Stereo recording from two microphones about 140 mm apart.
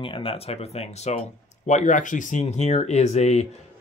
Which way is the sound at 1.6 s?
60° left (ahead or behind).